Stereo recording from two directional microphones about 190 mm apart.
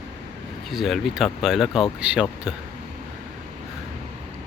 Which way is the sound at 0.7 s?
Centre (ahead or behind).